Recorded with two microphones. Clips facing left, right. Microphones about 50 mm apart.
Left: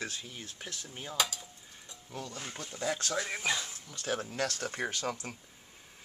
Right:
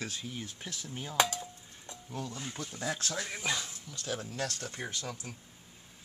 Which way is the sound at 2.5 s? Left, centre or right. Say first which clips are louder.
Left 4 dB; centre.